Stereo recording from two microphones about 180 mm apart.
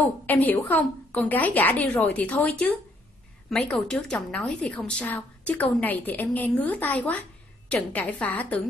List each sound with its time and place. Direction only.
0.0 s speech: 10° left (ahead or behind)